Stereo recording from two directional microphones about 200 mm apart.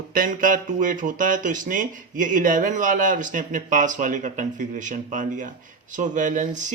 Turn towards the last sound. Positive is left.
turn(degrees=-40)  # may be behind; listen again after turning